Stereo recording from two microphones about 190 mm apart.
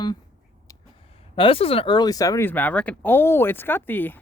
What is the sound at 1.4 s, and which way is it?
Speech, 30° left (ahead or behind).